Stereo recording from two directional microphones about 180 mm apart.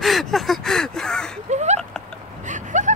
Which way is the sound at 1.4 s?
40° right (ahead or behind).